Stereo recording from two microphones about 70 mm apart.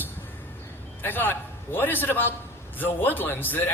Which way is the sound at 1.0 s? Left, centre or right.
Left.